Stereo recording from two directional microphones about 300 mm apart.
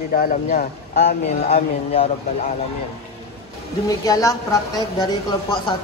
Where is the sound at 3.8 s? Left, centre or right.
Centre.